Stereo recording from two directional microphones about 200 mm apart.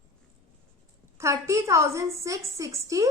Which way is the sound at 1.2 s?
15° right (ahead or behind).